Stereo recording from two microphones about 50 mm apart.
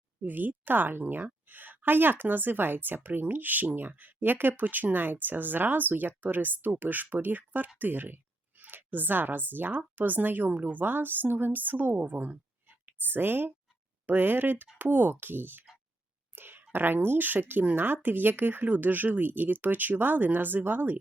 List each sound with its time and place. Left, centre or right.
0.2 s speech: right
16.3 s a sound: right
17.5 s speech: right